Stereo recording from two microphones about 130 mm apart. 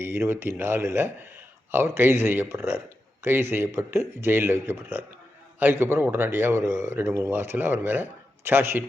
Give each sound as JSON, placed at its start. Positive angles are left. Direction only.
{"t": 0.0, "sound": "a man's voice", "side_deg": -20}